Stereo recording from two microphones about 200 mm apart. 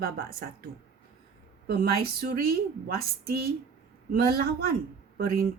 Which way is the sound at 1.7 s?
50° right (ahead or behind).